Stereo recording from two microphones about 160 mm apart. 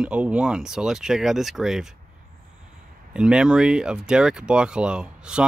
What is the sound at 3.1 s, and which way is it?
Speech, 5° right (ahead or behind).